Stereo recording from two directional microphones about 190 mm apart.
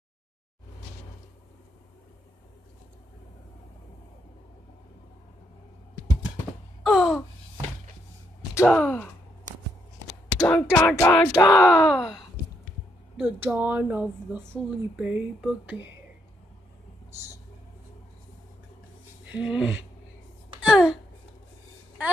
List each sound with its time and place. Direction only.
6.8 s gasp: centre (ahead or behind)
8.6 s speech: 5° left (ahead or behind)
10.4 s speech: 10° left (ahead or behind)
11.6 s speech: centre (ahead or behind)
19.3 s speech: 5° right (ahead or behind)
20.6 s a sound: 5° right (ahead or behind)